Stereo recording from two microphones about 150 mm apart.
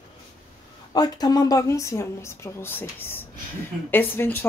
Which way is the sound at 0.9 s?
25° left (ahead or behind).